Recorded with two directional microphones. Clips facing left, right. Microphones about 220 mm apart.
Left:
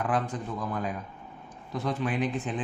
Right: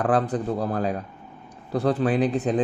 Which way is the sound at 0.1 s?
35° right (ahead or behind).